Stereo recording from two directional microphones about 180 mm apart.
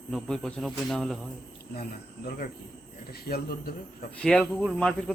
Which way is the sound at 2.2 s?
50° left (ahead or behind).